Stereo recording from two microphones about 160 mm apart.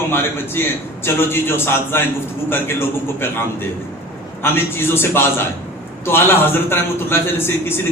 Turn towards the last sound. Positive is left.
turn(degrees=15)  # may be behind; listen again after turning